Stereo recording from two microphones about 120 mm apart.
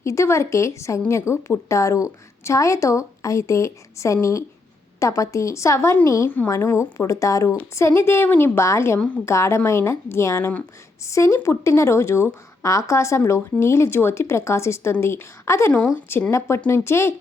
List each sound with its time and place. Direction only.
0.0 s a woman's voice: 25° left (ahead or behind)